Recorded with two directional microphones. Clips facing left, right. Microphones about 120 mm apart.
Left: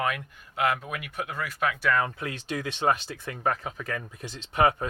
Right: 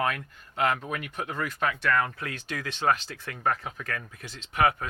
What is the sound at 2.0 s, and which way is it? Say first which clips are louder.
Speech: even; 20° left (ahead or behind).